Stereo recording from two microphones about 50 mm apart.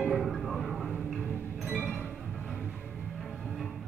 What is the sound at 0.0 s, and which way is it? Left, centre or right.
Music, centre.